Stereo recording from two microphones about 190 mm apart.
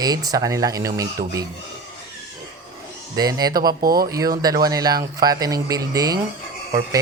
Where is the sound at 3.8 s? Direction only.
50° right (ahead or behind).